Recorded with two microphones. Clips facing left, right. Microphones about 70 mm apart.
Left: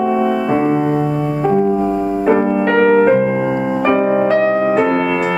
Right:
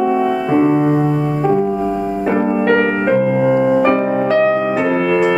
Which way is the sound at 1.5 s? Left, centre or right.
Centre.